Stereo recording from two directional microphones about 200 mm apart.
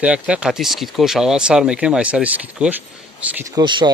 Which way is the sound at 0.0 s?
5° right (ahead or behind).